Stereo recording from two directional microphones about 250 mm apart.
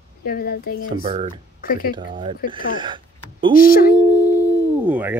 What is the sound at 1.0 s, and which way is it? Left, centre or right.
Speech, right.